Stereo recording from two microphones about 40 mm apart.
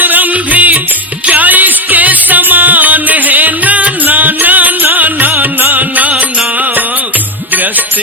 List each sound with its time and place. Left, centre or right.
0.0 s music: right